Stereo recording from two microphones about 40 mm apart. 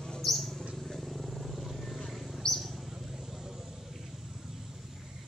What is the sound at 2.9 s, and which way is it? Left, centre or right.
Vehicle, centre.